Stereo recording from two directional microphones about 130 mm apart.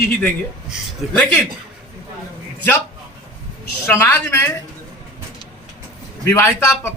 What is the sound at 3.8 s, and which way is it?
Speech, 15° left (ahead or behind).